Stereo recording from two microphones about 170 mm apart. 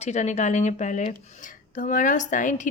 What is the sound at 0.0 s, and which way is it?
A woman's voice, 40° left (ahead or behind).